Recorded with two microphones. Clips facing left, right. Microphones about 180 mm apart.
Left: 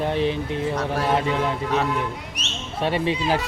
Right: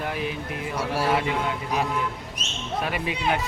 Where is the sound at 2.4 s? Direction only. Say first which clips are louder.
Left 2 dB; 75° left (ahead or behind).